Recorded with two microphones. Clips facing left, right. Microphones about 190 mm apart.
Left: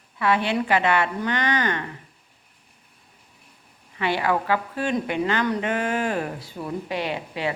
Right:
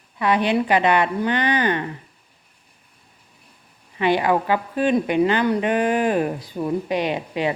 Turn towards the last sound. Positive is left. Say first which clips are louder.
# right 5 dB
turn(degrees=-20)  # may be behind; listen again after turning